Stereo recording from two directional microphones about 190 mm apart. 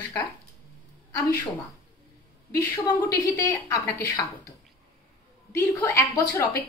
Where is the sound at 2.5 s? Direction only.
15° left (ahead or behind).